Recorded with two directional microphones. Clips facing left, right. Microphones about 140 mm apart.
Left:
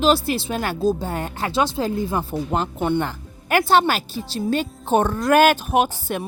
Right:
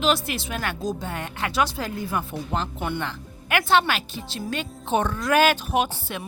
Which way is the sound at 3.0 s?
40° left (ahead or behind).